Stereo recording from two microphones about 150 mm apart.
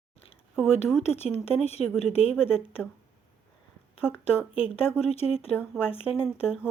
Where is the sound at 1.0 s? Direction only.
45° left (ahead or behind).